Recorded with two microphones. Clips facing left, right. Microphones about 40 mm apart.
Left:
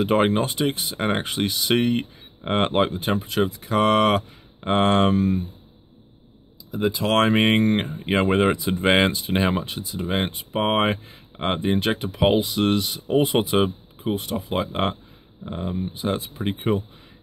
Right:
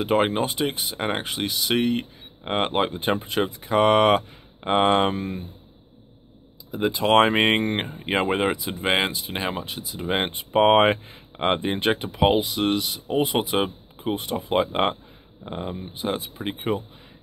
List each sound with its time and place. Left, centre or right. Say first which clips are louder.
0.0 s speech: left 2 dB; centre
2.9 s speech: even; centre
7.0 s speech: right 2 dB; centre
10.5 s speech: right 5 dB; right; by 14.0 s centre
14.0 s speech: left 1 dB; centre